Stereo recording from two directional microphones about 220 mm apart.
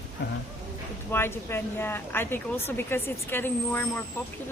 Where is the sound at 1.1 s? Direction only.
10° left (ahead or behind).